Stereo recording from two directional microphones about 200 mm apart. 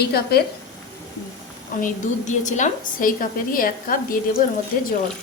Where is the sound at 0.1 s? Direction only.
50° left (ahead or behind).